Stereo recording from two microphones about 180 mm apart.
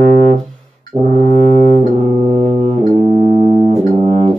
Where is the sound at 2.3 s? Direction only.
40° right (ahead or behind).